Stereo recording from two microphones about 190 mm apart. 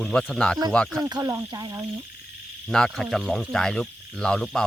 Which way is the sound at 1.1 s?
20° right (ahead or behind).